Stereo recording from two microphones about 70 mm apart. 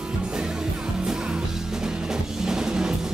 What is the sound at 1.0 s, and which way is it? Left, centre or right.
Music, centre.